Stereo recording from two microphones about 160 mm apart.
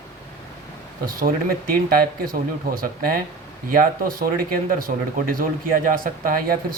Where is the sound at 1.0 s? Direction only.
60° right (ahead or behind).